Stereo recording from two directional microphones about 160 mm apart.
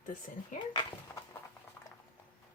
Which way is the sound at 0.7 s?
25° left (ahead or behind).